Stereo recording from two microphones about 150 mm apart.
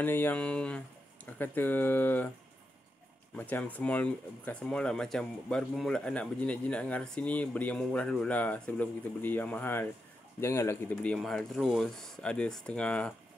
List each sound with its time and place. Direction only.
0.0 s speech: 15° left (ahead or behind)
3.3 s speech: 10° left (ahead or behind)
11.1 s speech: centre (ahead or behind)